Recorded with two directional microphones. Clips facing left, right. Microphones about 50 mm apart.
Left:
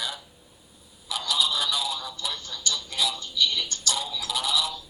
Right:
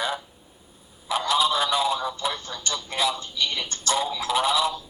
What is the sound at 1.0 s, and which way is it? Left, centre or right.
Telephone, right.